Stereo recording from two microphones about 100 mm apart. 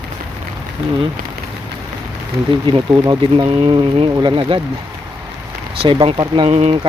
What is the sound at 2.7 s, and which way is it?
Speech, 55° right (ahead or behind).